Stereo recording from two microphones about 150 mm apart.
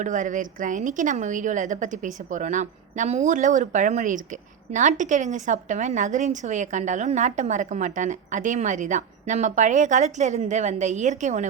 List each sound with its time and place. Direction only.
0.0 s a woman's voice: 55° right (ahead or behind)